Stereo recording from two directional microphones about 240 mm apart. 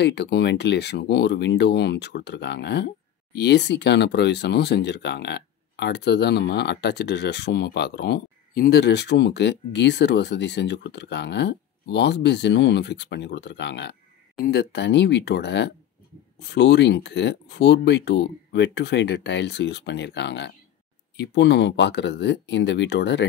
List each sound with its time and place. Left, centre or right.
0.0 s speech: left